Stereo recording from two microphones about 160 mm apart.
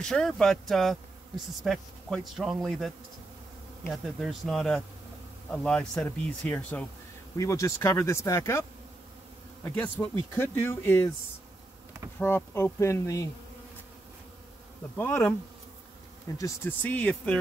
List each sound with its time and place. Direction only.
0.0 s a man's voice: 5° left (ahead or behind)
3.9 s a man's voice: centre (ahead or behind)
7.3 s speech: 20° left (ahead or behind)
9.7 s speech: 10° left (ahead or behind)
12.2 s speech: 15° left (ahead or behind)
15.0 s speech: 15° left (ahead or behind)
16.3 s speech: 15° left (ahead or behind)